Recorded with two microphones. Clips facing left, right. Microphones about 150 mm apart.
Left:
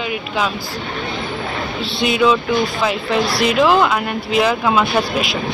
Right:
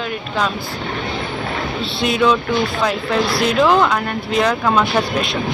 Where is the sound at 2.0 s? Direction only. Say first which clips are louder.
Left 1 dB; centre (ahead or behind).